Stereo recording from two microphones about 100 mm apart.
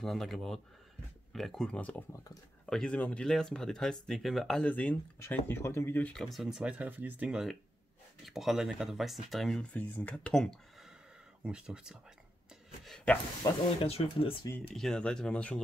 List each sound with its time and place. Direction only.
0.0 s speech: 5° left (ahead or behind)
4.6 s speech: 15° left (ahead or behind)
6.1 s speech: centre (ahead or behind)
11.4 s speech: 10° right (ahead or behind)
12.8 s speech: 10° left (ahead or behind)
13.4 s speech: 75° left (ahead or behind)
14.7 s speech: 5° left (ahead or behind)